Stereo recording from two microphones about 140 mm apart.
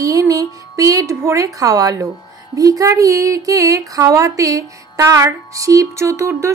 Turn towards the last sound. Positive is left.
turn(degrees=-20)  # may be behind; listen again after turning